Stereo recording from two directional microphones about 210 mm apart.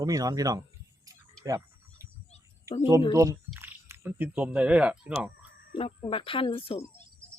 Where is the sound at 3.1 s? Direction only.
15° right (ahead or behind).